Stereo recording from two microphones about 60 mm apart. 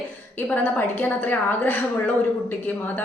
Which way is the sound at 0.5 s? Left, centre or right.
Left.